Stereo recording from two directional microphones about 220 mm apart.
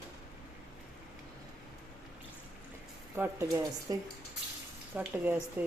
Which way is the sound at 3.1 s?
10° right (ahead or behind).